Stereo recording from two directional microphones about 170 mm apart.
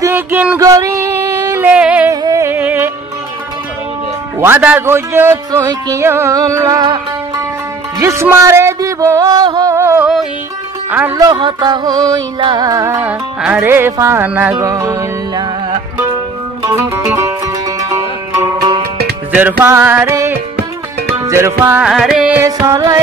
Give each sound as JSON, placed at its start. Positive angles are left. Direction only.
{"t": 0.0, "sound": "a sound", "side_deg": -10}
{"t": 2.2, "sound": "music", "side_deg": -15}
{"t": 4.4, "sound": "speech", "side_deg": -10}
{"t": 8.0, "sound": "music", "side_deg": -15}
{"t": 10.9, "sound": "speech", "side_deg": -10}
{"t": 11.1, "sound": "music", "side_deg": -25}
{"t": 13.4, "sound": "speech", "side_deg": -5}
{"t": 16.7, "sound": "music", "side_deg": -15}
{"t": 19.6, "sound": "speech", "side_deg": -15}